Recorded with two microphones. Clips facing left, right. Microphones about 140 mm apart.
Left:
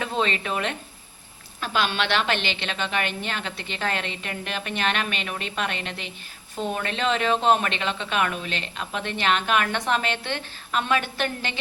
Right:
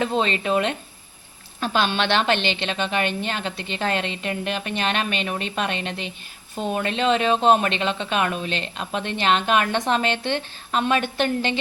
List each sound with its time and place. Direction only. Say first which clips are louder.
0.0 s speech: right 4 dB; 25° right (ahead or behind)